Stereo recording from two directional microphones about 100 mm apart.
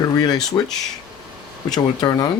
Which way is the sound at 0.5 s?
35° left (ahead or behind).